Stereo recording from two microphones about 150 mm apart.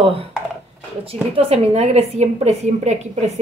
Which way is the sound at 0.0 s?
40° right (ahead or behind).